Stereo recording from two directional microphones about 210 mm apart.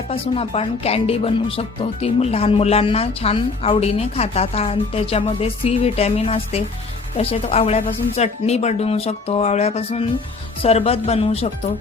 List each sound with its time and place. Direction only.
0.1 s a woman's voice: 25° left (ahead or behind)